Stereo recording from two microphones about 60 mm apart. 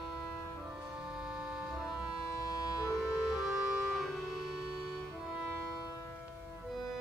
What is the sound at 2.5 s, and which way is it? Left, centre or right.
Music, left.